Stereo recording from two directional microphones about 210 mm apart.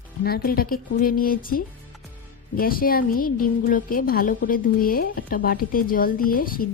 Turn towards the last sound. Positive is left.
turn(degrees=45)  # may be behind; listen again after turning